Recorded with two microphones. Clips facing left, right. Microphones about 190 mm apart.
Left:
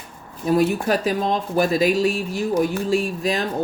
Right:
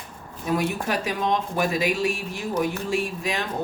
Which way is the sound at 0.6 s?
35° left (ahead or behind).